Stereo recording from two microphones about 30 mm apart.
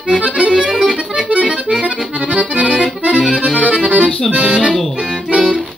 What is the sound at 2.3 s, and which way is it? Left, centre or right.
Accordion, right.